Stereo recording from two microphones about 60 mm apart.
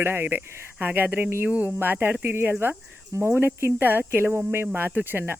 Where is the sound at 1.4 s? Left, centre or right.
Right.